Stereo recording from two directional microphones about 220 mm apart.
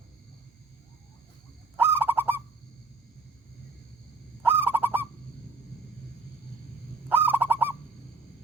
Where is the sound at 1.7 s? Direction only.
10° right (ahead or behind).